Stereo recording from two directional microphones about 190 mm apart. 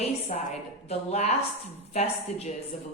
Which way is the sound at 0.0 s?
35° left (ahead or behind).